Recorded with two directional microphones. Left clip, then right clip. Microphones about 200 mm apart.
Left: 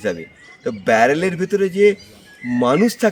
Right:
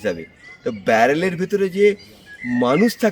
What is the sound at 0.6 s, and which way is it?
A man's voice, centre (ahead or behind).